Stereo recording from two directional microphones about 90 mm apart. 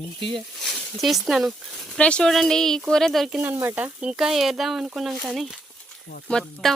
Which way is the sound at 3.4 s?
25° right (ahead or behind).